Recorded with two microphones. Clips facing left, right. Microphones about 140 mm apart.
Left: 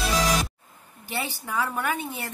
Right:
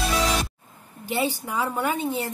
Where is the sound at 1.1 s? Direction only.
15° right (ahead or behind).